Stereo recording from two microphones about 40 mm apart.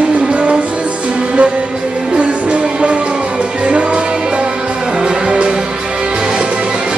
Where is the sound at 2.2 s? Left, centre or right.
Right.